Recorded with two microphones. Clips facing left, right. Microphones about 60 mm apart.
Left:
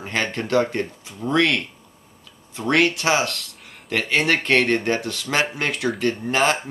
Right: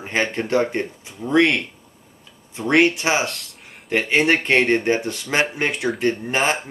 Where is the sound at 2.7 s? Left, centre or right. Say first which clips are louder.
Right 2 dB; right.